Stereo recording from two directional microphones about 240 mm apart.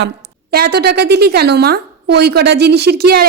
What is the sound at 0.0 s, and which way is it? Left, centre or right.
A woman's voice, right.